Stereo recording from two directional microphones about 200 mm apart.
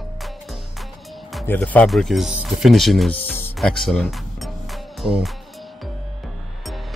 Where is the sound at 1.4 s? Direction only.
10° left (ahead or behind).